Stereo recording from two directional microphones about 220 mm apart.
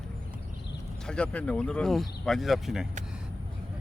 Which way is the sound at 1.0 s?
5° left (ahead or behind).